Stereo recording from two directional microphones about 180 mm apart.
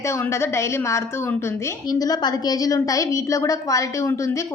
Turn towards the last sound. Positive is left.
turn(degrees=15)  # may be behind; listen again after turning